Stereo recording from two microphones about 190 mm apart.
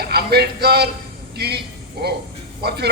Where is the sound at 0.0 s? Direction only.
55° right (ahead or behind).